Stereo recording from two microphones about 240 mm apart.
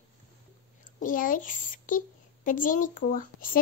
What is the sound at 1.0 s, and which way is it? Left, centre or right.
A woman's voice, left.